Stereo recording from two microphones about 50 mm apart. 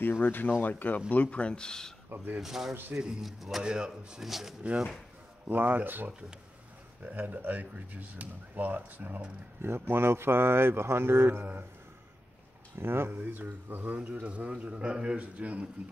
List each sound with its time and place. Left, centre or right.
0.0 s speech: left; by 2.0 s centre
2.0 s speech: right
2.4 s a man's voice: centre
3.6 s speech: centre
4.2 s a man's voice: centre
5.5 s speech: right
9.6 s speech: right
12.7 s a man's voice: right